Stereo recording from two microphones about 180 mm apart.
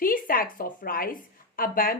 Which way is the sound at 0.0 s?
50° left (ahead or behind).